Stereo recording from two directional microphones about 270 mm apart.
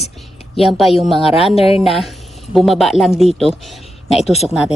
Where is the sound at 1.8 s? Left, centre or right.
Centre.